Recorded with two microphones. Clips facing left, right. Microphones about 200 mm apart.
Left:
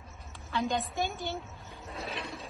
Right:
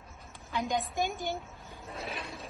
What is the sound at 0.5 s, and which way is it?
Speech, 15° right (ahead or behind).